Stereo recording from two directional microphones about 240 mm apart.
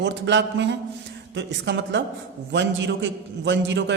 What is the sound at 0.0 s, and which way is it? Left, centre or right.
A man's voice, right.